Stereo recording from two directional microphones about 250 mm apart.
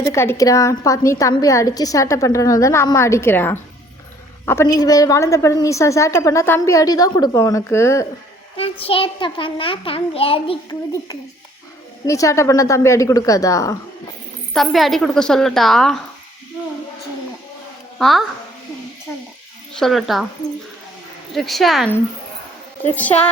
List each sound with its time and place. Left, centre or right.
0.0 s a woman's voice: centre
8.5 s a child's voice: left
14.5 s a woman's voice: centre
18.0 s a woman's voice: centre
19.8 s a woman's voice: centre
21.3 s a woman's voice: centre